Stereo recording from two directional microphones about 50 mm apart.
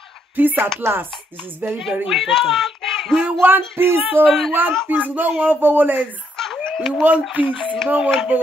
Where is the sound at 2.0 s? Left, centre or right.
Centre.